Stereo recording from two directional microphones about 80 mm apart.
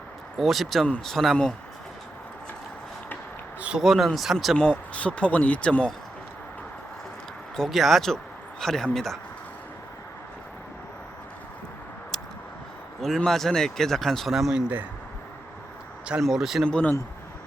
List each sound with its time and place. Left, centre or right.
0.3 s speech: centre
3.8 s speech: centre
4.5 s speech: centre
7.5 s speech: centre
13.0 s speech: centre
16.2 s speech: centre
16.6 s speech: centre